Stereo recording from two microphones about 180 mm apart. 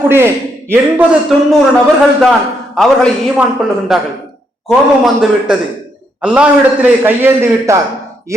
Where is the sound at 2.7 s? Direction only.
Centre (ahead or behind).